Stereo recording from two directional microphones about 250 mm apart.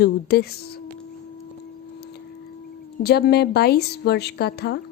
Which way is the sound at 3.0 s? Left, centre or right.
Left.